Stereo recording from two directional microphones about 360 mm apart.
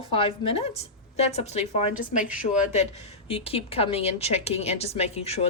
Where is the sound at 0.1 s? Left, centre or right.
Centre.